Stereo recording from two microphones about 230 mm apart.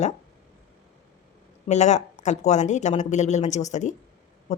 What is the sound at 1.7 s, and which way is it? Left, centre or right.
Speech, left.